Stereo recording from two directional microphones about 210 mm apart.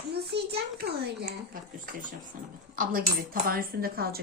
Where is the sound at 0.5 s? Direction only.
50° right (ahead or behind).